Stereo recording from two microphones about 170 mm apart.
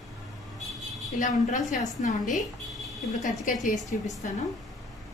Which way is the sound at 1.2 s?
50° left (ahead or behind).